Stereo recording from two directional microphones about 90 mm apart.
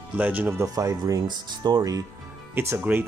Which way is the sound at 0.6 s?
40° right (ahead or behind).